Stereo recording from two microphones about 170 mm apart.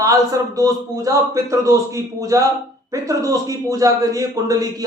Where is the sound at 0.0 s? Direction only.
20° right (ahead or behind).